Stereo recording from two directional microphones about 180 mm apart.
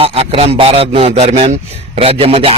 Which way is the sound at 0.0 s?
35° right (ahead or behind).